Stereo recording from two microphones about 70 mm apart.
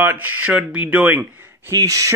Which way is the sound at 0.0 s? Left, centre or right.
Right.